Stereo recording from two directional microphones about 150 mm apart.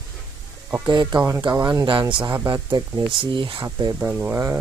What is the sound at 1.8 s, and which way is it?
Speech, 35° right (ahead or behind).